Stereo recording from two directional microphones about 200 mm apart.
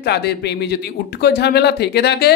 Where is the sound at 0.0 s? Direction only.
55° left (ahead or behind).